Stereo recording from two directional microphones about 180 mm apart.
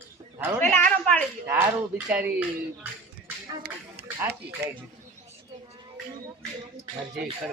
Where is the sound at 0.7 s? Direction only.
10° left (ahead or behind).